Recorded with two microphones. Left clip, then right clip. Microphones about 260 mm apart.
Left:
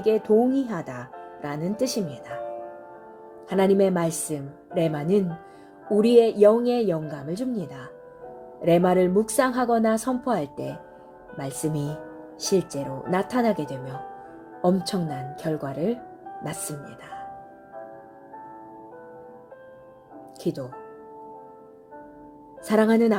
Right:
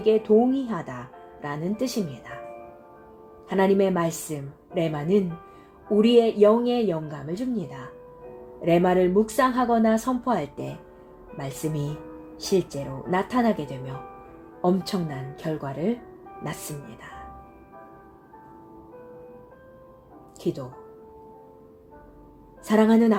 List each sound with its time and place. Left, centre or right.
0.0 s a woman's voice: left
3.5 s a woman's voice: left
20.4 s a woman's voice: left
22.6 s a woman's voice: left